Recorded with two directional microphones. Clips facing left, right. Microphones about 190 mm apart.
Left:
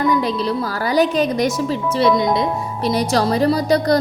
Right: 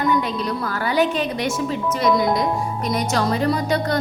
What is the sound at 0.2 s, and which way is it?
Speech, 35° left (ahead or behind).